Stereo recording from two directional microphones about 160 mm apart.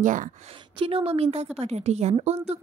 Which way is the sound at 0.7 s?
35° right (ahead or behind).